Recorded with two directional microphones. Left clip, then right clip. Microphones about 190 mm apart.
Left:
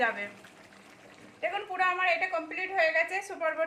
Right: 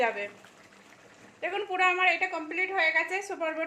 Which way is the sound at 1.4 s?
35° right (ahead or behind).